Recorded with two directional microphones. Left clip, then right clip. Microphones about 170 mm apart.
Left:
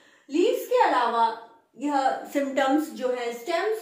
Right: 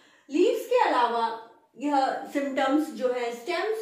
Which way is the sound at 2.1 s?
30° left (ahead or behind).